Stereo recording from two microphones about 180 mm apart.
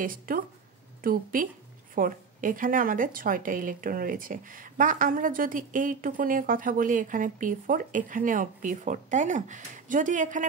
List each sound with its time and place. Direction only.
0.0 s a woman's voice: 50° right (ahead or behind)